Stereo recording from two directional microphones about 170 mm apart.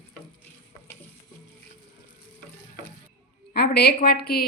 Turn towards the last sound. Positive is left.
turn(degrees=65)  # may be behind; listen again after turning